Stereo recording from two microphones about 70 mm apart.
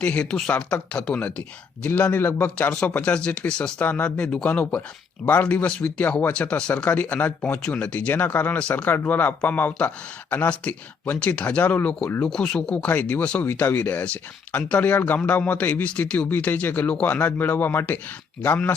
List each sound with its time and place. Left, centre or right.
0.0 s speech: centre